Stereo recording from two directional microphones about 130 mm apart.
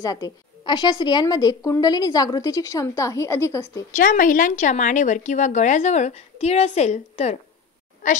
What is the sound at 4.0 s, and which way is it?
Speech, 90° left.